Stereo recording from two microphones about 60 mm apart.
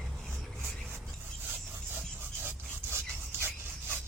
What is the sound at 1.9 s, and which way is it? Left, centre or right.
Rub, right.